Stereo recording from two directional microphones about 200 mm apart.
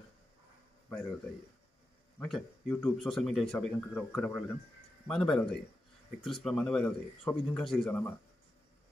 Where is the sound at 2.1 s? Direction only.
5° left (ahead or behind).